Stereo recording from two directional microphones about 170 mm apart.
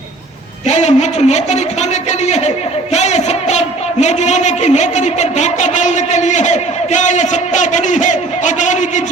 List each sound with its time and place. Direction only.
0.7 s a man's voice: 40° left (ahead or behind)